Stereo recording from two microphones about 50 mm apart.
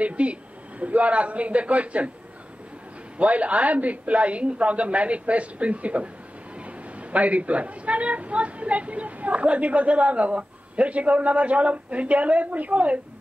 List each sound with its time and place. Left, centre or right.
0.0 s a woman's voice: right
3.2 s a woman's voice: right